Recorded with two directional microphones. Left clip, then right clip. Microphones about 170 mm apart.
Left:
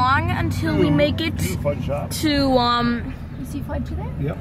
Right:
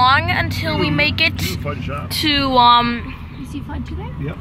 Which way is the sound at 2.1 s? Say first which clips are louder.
Right 5 dB; 5° right (ahead or behind).